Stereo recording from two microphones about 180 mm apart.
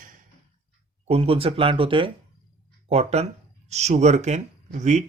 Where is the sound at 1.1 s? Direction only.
35° right (ahead or behind).